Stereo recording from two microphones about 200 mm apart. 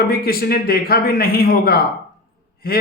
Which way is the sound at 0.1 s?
50° left (ahead or behind).